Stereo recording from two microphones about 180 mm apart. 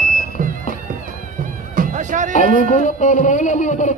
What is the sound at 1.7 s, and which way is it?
Music, 45° right (ahead or behind).